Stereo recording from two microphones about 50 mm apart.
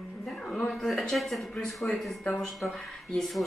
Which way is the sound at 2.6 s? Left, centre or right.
Left.